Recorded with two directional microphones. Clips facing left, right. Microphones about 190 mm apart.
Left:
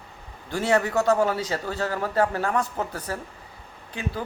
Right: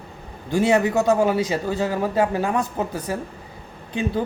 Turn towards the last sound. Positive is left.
turn(degrees=-20)  # may be behind; listen again after turning